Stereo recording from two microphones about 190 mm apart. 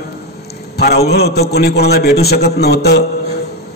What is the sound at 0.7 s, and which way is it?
A man's voice, 55° left (ahead or behind).